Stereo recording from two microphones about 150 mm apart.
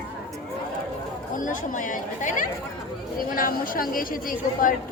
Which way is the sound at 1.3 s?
60° left (ahead or behind).